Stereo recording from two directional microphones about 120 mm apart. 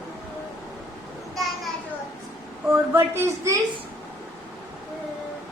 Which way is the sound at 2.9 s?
20° right (ahead or behind).